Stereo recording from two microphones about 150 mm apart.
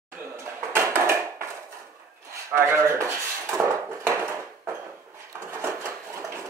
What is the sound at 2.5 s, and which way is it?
Dishes, 15° right (ahead or behind).